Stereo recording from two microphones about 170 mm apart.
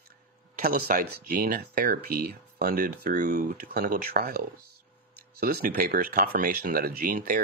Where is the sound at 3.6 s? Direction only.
60° right (ahead or behind).